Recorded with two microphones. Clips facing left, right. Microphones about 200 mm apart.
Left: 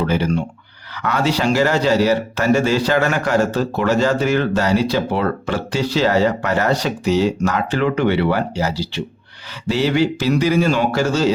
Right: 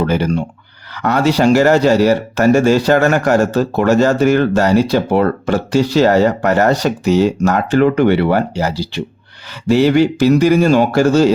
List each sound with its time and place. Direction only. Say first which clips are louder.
0.0 s speech: right 3 dB; 45° right (ahead or behind)